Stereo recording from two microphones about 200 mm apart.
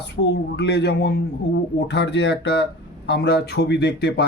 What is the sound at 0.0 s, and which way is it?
Speech, 60° left (ahead or behind).